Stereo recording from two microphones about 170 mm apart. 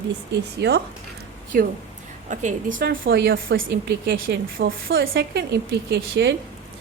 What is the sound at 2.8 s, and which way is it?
A woman's voice, 65° right (ahead or behind).